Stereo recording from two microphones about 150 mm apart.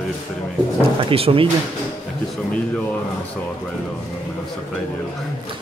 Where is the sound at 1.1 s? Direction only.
40° right (ahead or behind).